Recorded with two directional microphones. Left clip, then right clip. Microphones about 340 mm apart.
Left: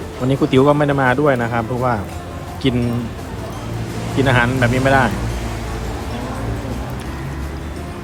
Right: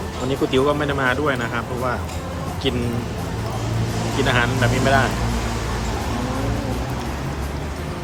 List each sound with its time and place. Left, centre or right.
0.3 s speech: centre
4.2 s speech: centre